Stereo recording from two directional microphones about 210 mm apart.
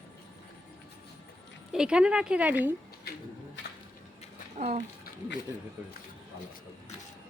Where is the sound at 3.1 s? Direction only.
50° left (ahead or behind).